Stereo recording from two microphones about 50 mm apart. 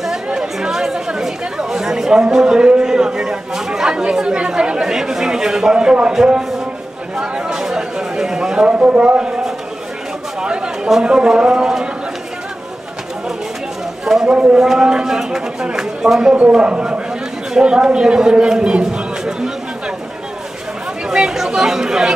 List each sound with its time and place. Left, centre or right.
0.0 s speech: centre
7.2 s a sound: centre
8.6 s speech: right
10.4 s chatter: centre
10.9 s speech: centre
14.1 s a sound: centre
14.6 s a man's voice: centre
21.1 s speech: centre